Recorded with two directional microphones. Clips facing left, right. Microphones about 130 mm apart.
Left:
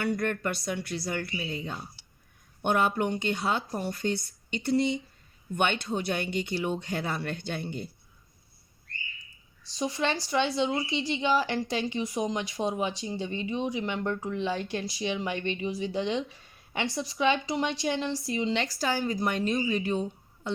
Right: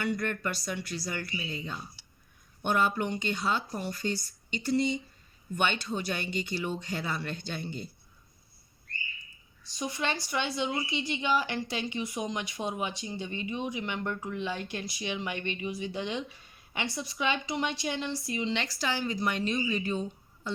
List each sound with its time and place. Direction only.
0.0 s speech: 55° left (ahead or behind)
9.6 s speech: 30° left (ahead or behind); by 20.5 s 60° left (ahead or behind)